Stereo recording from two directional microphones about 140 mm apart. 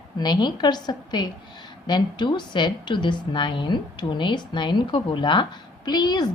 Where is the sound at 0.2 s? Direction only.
30° left (ahead or behind).